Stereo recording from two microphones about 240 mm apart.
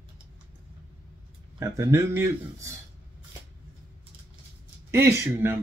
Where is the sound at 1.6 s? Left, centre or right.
Centre.